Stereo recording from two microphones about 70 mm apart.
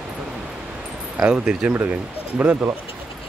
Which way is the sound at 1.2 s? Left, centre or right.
Centre.